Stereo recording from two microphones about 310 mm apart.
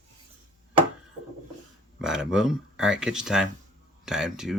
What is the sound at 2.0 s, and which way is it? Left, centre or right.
Speech, centre.